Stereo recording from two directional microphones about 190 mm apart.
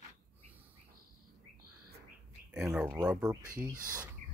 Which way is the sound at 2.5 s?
5° right (ahead or behind).